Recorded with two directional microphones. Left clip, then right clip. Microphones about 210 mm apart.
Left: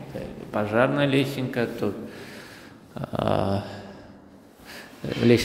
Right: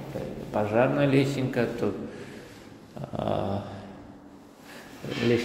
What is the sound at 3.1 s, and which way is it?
Dog, 30° left (ahead or behind).